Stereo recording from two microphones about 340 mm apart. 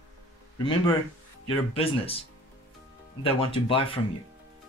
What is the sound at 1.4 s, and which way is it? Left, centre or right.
Speech, centre.